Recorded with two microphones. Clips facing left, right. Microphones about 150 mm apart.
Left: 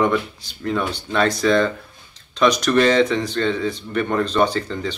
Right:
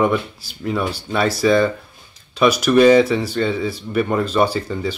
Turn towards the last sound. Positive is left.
turn(degrees=-10)  # may be behind; listen again after turning